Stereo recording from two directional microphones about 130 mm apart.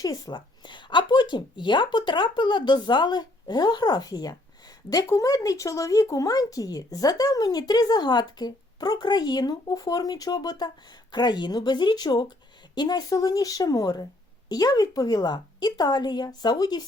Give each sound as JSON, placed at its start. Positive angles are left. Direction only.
{"t": 0.0, "sound": "a woman's voice", "side_deg": 30}